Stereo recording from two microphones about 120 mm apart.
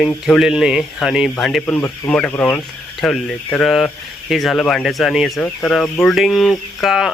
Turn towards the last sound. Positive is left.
turn(degrees=0)  # may be behind; listen again after turning